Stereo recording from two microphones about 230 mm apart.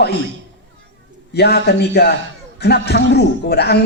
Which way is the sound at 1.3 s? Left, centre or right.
Left.